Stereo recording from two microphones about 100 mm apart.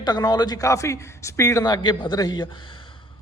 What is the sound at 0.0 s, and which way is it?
Speech, 45° left (ahead or behind).